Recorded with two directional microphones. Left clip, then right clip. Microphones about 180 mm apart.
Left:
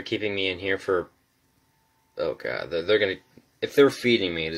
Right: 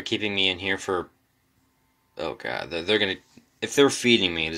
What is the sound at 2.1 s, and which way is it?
Speech, 30° right (ahead or behind).